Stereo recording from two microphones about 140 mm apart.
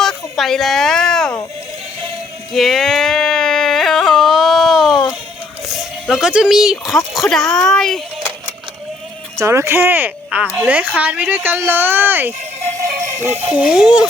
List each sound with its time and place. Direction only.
0.0 s a sound: centre (ahead or behind)
2.5 s a sound: centre (ahead or behind)
5.6 s speech: 5° right (ahead or behind)
9.4 s speech: 20° right (ahead or behind)
12.6 s music: 60° right (ahead or behind)
13.2 s speech: 15° right (ahead or behind)